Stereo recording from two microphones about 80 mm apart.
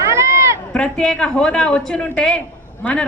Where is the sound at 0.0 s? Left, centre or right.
Right.